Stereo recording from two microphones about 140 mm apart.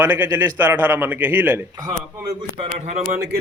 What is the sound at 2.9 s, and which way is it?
Speech, 60° right (ahead or behind).